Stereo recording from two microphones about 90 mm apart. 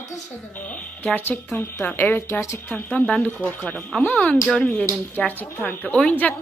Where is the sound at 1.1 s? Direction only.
25° left (ahead or behind).